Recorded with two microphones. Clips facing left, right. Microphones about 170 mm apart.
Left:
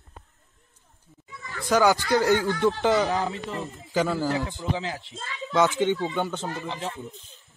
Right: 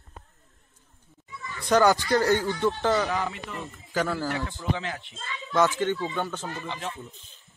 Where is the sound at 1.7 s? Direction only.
10° left (ahead or behind).